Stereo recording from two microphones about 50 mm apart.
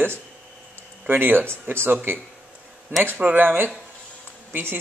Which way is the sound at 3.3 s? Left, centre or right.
Right.